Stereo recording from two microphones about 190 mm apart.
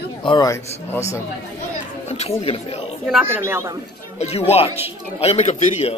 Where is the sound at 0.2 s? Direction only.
25° left (ahead or behind).